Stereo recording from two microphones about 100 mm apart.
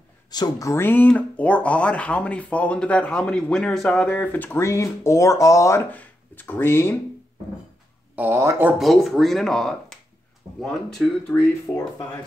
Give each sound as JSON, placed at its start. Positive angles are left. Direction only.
{"t": 0.3, "sound": "speech", "side_deg": 40}
{"t": 5.9, "sound": "speech", "side_deg": 15}
{"t": 8.2, "sound": "speech", "side_deg": -25}
{"t": 8.7, "sound": "speech", "side_deg": 0}